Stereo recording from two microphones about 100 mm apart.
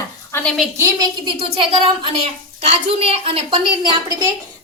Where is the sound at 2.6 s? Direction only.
90° right.